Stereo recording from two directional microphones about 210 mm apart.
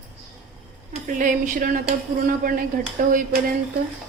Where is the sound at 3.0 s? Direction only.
45° right (ahead or behind).